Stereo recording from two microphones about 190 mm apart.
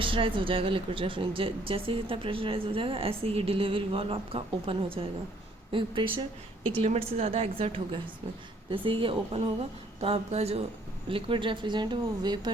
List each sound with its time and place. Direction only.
0.0 s a woman's voice: 25° right (ahead or behind)